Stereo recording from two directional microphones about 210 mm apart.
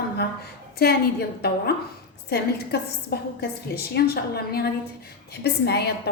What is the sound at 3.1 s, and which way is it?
A woman's voice, 50° left (ahead or behind).